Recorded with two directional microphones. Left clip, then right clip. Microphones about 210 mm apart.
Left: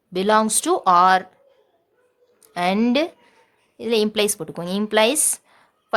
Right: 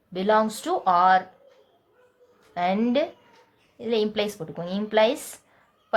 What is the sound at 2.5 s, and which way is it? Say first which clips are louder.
A woman's voice: left 3 dB; 45° left (ahead or behind).